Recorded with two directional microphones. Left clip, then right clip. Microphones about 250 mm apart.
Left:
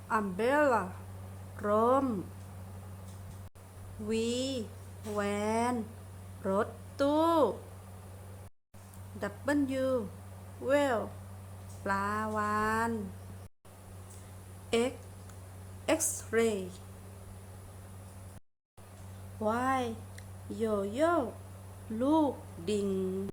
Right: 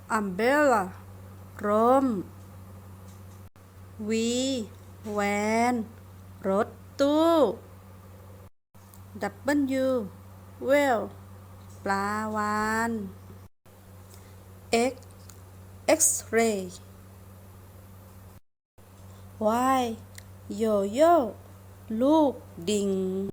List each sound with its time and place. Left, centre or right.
0.1 s mantra: centre
4.1 s mantra: centre
6.4 s speech: centre
9.1 s mantra: centre
14.7 s a woman's voice: centre
19.4 s a woman's voice: right